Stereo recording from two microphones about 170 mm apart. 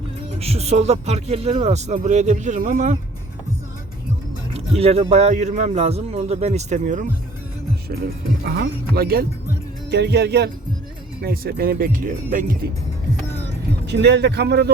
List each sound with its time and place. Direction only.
0.3 s a man's voice: 35° right (ahead or behind)
4.5 s a man's voice: 35° right (ahead or behind)
8.4 s speech: 65° right (ahead or behind)
9.9 s speech: 80° right; by 12.5 s 50° right (ahead or behind)
13.8 s speech: 90° right